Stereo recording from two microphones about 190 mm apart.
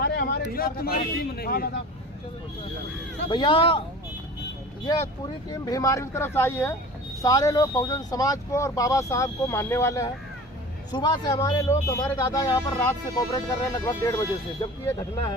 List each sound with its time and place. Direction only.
0.0 s speech: 55° left (ahead or behind)
3.2 s speech: 25° left (ahead or behind)
5.5 s speech: 20° left (ahead or behind)